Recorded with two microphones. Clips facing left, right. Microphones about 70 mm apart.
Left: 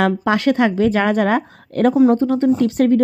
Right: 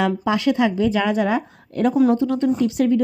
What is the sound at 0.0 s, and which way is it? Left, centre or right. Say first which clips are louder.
Speech: left 3 dB; left.